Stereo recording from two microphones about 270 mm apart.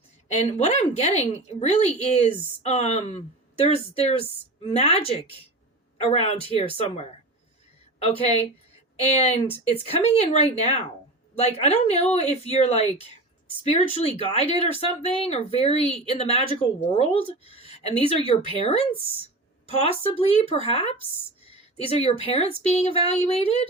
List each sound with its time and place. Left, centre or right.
0.3 s a woman's voice: left
7.9 s a woman's voice: left